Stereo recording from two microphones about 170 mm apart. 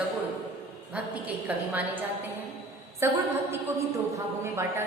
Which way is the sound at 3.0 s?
15° right (ahead or behind).